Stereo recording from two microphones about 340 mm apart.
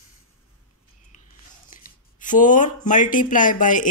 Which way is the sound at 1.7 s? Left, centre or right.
Left.